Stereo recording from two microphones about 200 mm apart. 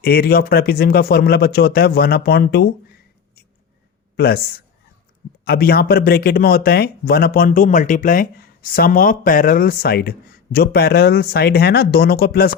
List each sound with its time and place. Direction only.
0.0 s speech: 50° left (ahead or behind)
4.2 s speech: 50° left (ahead or behind)